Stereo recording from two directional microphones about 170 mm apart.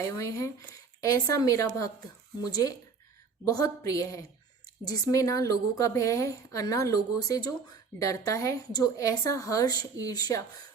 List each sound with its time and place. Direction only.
0.0 s a woman's voice: 20° left (ahead or behind)